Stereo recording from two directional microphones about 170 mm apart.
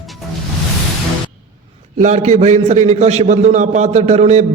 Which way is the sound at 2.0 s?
45° right (ahead or behind).